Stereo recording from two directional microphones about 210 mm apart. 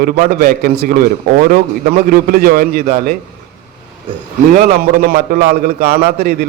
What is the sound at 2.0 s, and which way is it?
A man's voice, 45° right (ahead or behind).